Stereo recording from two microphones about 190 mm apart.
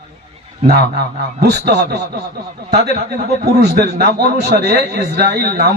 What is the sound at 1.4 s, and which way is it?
Speech, 60° right (ahead or behind).